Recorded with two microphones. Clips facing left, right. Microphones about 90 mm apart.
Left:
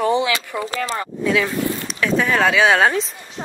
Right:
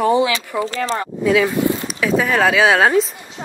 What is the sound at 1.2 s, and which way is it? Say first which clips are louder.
Speech: right 4 dB; 5° right (ahead or behind).